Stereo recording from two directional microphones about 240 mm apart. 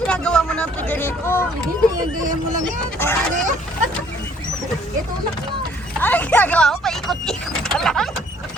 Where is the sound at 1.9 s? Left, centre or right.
Right.